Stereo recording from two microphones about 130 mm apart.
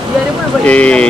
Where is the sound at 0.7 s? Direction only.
10° left (ahead or behind).